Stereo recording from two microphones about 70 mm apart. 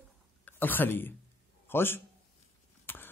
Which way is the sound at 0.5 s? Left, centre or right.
Left.